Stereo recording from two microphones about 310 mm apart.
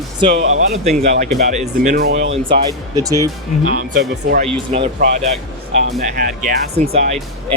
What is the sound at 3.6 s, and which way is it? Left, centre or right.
Speech, right.